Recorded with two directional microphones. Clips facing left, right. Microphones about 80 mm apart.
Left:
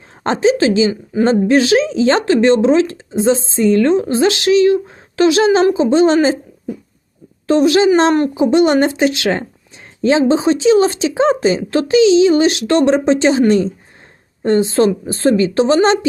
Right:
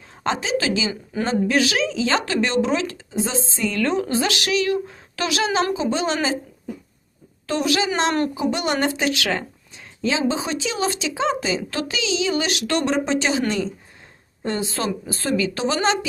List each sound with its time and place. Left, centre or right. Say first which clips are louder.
0.2 s a woman's voice: left 9 dB; left
7.4 s a woman's voice: left 11 dB; left
14.4 s a woman's voice: left 12 dB; left